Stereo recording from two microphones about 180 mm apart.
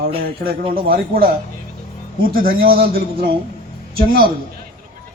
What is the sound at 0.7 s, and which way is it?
Speech, 55° right (ahead or behind).